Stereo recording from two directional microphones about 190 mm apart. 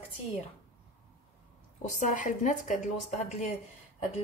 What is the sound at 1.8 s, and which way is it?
A woman's voice, 40° left (ahead or behind).